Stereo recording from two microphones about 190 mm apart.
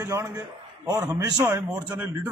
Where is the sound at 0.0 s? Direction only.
15° right (ahead or behind).